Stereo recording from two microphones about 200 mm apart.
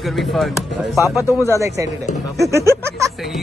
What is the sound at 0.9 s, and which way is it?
Speech, 15° left (ahead or behind).